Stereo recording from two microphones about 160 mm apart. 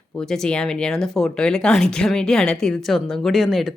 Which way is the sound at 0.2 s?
5° left (ahead or behind).